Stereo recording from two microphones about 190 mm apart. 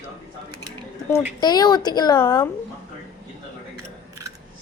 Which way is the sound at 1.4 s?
20° left (ahead or behind).